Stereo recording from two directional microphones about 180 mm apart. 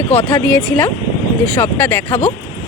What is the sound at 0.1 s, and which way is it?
Speech, 35° left (ahead or behind).